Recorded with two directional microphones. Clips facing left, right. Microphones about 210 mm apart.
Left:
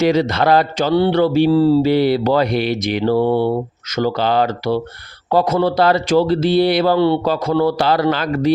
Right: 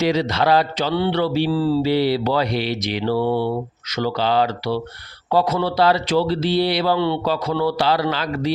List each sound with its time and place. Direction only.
0.0 s speech: 50° left (ahead or behind)